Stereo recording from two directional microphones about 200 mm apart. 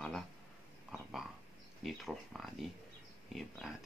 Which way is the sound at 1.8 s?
Centre (ahead or behind).